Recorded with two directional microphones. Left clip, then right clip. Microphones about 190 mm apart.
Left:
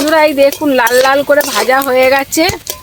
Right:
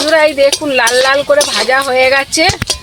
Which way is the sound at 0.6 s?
75° left (ahead or behind).